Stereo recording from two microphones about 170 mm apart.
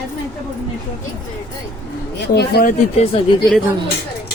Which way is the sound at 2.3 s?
65° left (ahead or behind).